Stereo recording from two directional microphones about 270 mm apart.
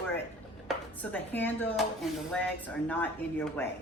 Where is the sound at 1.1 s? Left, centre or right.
Centre.